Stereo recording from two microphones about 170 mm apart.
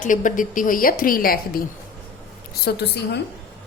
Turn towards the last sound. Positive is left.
turn(degrees=80)